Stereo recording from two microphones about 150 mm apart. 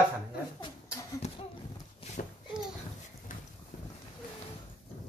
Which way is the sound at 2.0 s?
40° left (ahead or behind).